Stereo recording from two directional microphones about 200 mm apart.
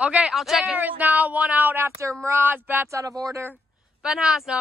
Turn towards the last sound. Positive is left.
turn(degrees=0)  # may be behind; listen again after turning